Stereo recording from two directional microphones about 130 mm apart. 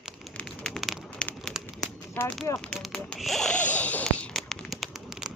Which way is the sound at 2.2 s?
15° left (ahead or behind).